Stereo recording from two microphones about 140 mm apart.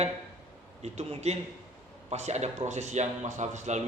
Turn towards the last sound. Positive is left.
turn(degrees=-55)  # may be behind; listen again after turning